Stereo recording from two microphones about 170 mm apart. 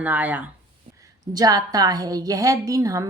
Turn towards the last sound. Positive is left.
turn(degrees=-20)  # may be behind; listen again after turning